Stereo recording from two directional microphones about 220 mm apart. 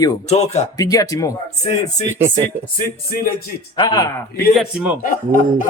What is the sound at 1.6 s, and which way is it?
Speech, 30° left (ahead or behind).